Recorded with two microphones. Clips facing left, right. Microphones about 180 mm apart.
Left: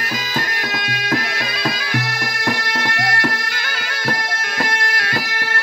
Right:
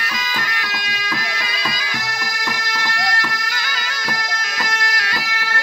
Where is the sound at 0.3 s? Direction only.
50° left (ahead or behind).